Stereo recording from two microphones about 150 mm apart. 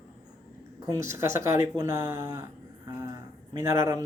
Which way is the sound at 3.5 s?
25° right (ahead or behind).